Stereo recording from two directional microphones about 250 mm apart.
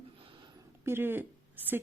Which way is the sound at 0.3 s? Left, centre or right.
Centre.